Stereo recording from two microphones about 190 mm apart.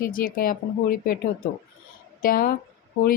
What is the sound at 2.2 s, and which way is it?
Speech, 50° left (ahead or behind).